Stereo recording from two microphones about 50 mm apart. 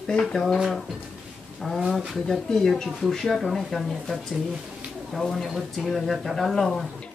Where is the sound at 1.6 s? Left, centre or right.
Centre.